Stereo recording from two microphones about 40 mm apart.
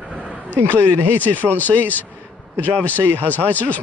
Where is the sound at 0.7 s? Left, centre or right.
Right.